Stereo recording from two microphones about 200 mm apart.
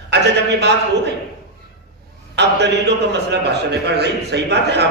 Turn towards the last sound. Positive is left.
turn(degrees=-55)  # may be behind; listen again after turning